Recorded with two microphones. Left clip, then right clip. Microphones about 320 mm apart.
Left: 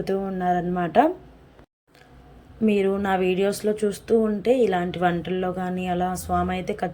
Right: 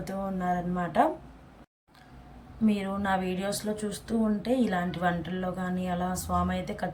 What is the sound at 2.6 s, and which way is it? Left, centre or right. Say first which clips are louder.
A woman's voice: left 7 dB; centre.